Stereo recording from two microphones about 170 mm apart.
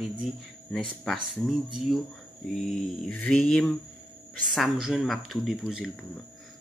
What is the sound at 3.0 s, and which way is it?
Speech, 10° left (ahead or behind).